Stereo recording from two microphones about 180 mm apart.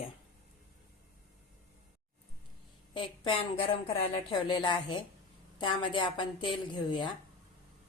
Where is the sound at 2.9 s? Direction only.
30° left (ahead or behind).